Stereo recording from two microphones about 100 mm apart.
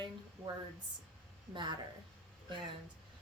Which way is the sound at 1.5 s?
50° right (ahead or behind).